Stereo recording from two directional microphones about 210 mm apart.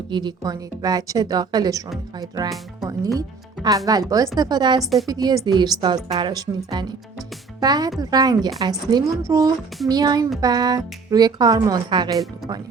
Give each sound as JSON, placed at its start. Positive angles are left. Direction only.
{"t": 0.1, "sound": "a woman's voice", "side_deg": -20}
{"t": 4.8, "sound": "a woman's voice", "side_deg": 0}
{"t": 5.0, "sound": "a woman's voice", "side_deg": -15}